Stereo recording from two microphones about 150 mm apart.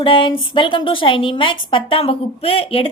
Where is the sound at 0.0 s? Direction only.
35° left (ahead or behind).